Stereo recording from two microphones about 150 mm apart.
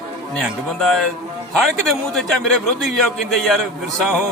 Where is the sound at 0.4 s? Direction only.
Centre (ahead or behind).